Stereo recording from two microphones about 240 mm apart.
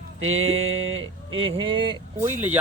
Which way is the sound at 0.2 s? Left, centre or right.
Right.